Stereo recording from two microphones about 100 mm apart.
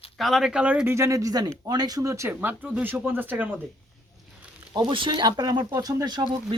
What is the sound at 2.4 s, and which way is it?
Speech, 15° right (ahead or behind).